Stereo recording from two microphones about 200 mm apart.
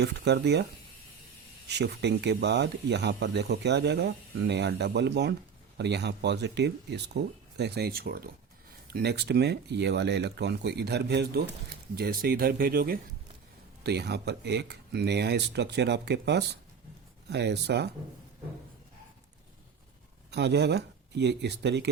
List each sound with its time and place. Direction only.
0.0 s speech: 55° right (ahead or behind)
20.3 s speech: 60° right (ahead or behind)